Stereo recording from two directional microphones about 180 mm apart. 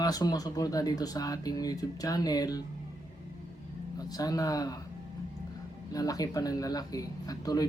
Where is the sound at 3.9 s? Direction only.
20° left (ahead or behind).